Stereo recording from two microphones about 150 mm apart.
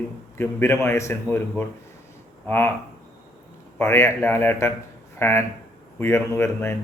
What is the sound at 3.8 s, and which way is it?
Speech, 15° left (ahead or behind).